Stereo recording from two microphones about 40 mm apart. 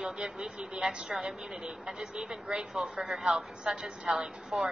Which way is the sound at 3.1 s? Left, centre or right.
Centre.